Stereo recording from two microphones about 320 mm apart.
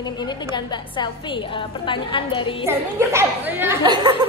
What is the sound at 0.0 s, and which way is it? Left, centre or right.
A woman's voice, centre.